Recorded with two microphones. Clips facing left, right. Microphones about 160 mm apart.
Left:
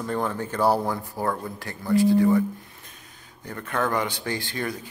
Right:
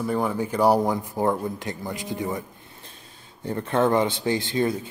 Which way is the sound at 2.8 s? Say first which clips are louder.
Right 2 dB; 30° right (ahead or behind).